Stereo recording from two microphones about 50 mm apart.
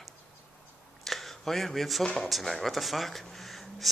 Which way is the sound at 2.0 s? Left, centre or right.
Centre.